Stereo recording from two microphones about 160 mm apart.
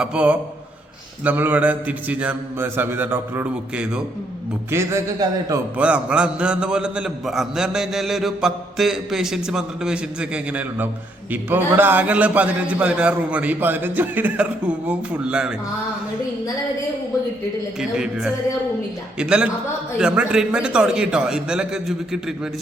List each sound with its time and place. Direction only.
0.0 s a man's voice: 5° right (ahead or behind)
4.7 s a man's voice: 15° right (ahead or behind)
5.7 s a man's voice: 5° right (ahead or behind)
17.7 s a man's voice: 5° right (ahead or behind)